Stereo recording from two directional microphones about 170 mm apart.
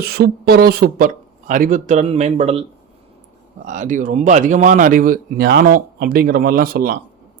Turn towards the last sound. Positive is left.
turn(degrees=-60)  # may be behind; listen again after turning